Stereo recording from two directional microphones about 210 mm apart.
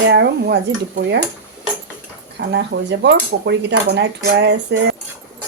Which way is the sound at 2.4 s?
55° right (ahead or behind).